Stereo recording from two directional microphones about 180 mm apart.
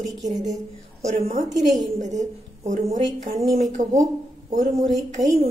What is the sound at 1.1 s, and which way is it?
Speech, 35° right (ahead or behind).